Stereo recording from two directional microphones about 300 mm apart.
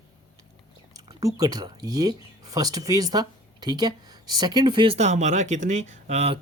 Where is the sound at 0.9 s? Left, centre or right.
Centre.